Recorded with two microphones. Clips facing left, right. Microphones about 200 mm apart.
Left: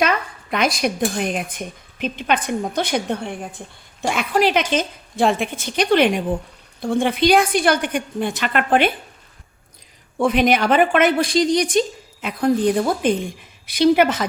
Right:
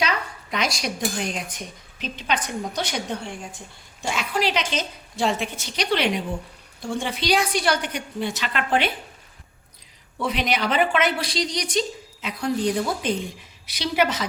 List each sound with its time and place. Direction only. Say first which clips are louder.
0.5 s a woman's voice: left 6 dB; 55° left (ahead or behind)
10.2 s a woman's voice: left 8 dB; 50° left (ahead or behind)